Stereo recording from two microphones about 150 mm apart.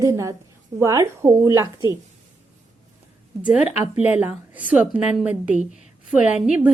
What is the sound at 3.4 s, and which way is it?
A woman's voice, 10° right (ahead or behind).